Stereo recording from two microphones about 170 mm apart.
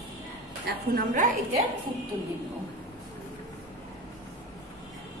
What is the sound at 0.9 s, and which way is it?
Speech, 50° right (ahead or behind).